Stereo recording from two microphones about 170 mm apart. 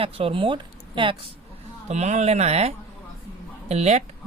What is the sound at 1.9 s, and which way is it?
Speech, 40° right (ahead or behind).